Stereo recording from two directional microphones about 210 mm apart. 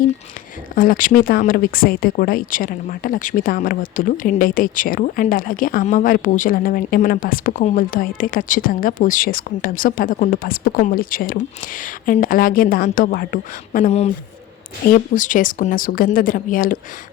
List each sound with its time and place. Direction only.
0.8 s speech: 40° left (ahead or behind)
15.1 s speech: 40° left (ahead or behind)